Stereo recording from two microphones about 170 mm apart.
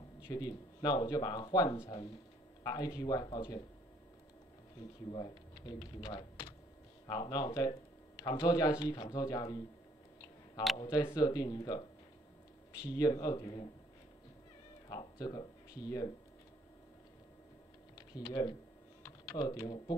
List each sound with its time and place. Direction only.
0.3 s speech: 20° left (ahead or behind)
5.1 s speech: 25° left (ahead or behind)
10.8 s speech: 30° left (ahead or behind)
14.9 s speech: 25° left (ahead or behind)
17.9 s speech: 25° left (ahead or behind)